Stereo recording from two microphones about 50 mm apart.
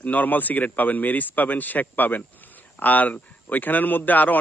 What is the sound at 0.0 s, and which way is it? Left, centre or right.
A man's voice, left.